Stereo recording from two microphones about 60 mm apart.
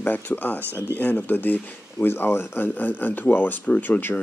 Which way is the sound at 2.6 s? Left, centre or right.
Left.